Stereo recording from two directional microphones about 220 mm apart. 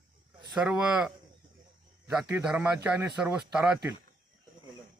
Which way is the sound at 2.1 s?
5° right (ahead or behind).